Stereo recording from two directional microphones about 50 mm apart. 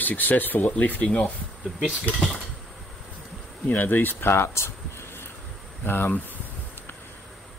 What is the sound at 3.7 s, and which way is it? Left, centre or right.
Speech, left.